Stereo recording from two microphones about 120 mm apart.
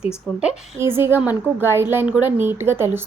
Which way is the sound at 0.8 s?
20° right (ahead or behind).